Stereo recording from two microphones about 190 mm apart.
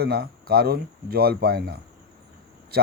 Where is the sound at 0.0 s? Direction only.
55° right (ahead or behind).